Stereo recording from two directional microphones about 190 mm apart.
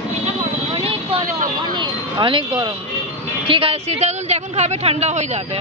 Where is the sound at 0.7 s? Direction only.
30° right (ahead or behind).